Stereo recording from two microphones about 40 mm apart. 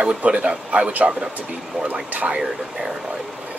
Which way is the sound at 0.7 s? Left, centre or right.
Right.